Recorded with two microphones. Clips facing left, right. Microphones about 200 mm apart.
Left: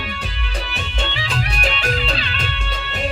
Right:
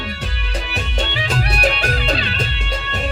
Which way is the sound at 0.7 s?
40° right (ahead or behind).